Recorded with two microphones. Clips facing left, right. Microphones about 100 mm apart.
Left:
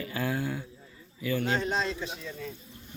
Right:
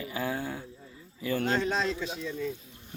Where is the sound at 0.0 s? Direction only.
20° right (ahead or behind).